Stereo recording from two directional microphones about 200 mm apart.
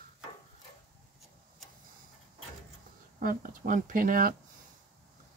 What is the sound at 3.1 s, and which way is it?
Speech, 45° right (ahead or behind).